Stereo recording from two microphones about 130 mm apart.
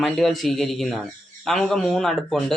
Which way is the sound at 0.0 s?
Centre (ahead or behind).